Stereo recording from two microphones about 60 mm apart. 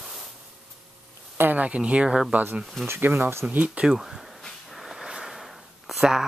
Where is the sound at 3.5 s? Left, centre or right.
Right.